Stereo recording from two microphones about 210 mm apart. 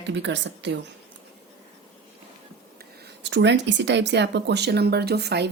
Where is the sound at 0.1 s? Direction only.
55° right (ahead or behind).